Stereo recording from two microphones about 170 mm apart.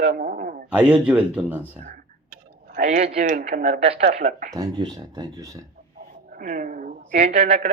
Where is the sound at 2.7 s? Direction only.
50° right (ahead or behind).